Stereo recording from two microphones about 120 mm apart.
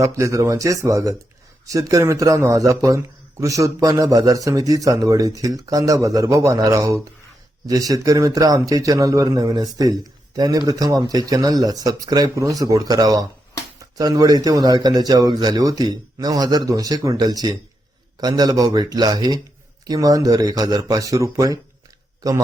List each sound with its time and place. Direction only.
0.0 s a man's voice: 25° right (ahead or behind)